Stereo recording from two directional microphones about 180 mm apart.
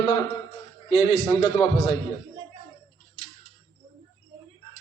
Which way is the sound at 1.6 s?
30° left (ahead or behind).